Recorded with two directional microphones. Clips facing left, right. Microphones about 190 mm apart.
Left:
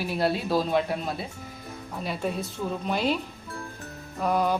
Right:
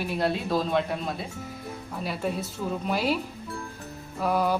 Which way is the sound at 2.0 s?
5° right (ahead or behind).